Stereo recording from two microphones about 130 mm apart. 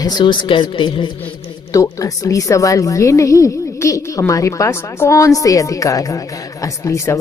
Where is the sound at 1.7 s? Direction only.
25° left (ahead or behind).